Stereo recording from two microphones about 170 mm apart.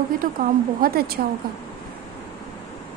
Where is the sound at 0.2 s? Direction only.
55° right (ahead or behind).